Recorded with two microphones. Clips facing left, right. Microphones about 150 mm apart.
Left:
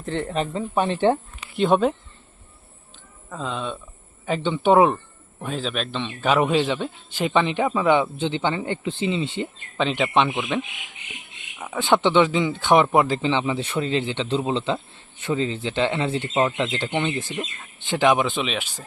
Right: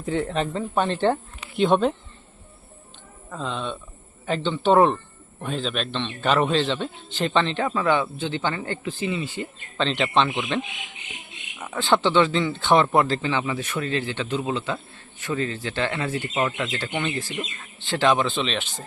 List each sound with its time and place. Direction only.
0.0 s a man's voice: centre (ahead or behind)
3.2 s a man's voice: centre (ahead or behind); by 9.5 s 25° left (ahead or behind)
9.7 s a man's voice: 10° left (ahead or behind)
11.6 s a man's voice: 15° left (ahead or behind)